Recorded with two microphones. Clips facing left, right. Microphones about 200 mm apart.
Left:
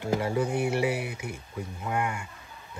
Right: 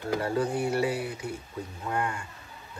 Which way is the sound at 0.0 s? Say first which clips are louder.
Left 1 dB; 15° left (ahead or behind).